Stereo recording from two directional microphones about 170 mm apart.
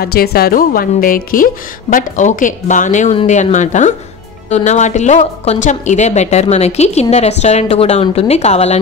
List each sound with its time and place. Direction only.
0.0 s a woman's voice: 65° left (ahead or behind); by 8.7 s 40° left (ahead or behind)